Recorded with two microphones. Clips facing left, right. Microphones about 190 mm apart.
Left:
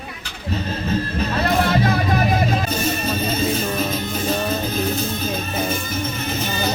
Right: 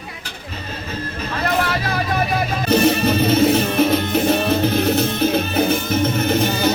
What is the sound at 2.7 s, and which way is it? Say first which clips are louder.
Music: right 7 dB; 70° right (ahead or behind).